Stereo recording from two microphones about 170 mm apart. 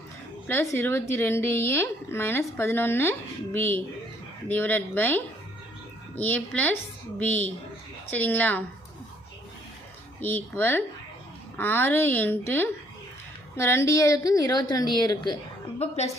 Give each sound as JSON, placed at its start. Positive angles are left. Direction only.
{"t": 0.4, "sound": "a woman's voice", "side_deg": 15}
{"t": 10.2, "sound": "a woman's voice", "side_deg": 10}